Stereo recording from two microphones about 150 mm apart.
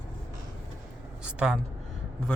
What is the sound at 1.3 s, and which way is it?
Speech, 5° right (ahead or behind).